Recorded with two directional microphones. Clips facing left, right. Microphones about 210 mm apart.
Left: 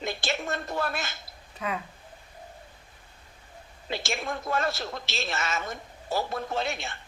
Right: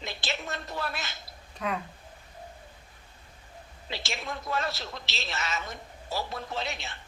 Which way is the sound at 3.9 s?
50° left (ahead or behind).